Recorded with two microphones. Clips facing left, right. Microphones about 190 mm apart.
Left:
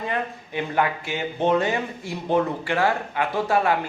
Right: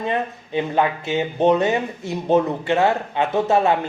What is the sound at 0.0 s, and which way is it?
Speech, 20° right (ahead or behind).